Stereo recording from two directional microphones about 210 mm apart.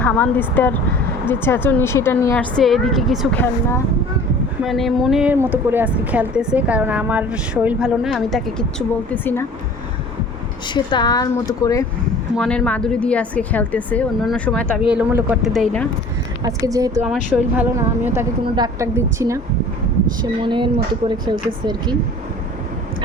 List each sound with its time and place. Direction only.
0.0 s a woman's voice: 10° left (ahead or behind)
4.6 s a woman's voice: centre (ahead or behind)
10.8 s a woman's voice: 20° left (ahead or behind)
12.4 s speech: 5° left (ahead or behind)
14.9 s speech: 5° right (ahead or behind)
16.4 s a woman's voice: 15° right (ahead or behind)
17.1 s a woman's voice: 5° right (ahead or behind)
20.4 s a woman's voice: 25° right (ahead or behind)